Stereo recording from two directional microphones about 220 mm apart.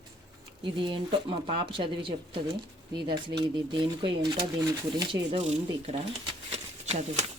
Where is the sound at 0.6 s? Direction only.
20° right (ahead or behind).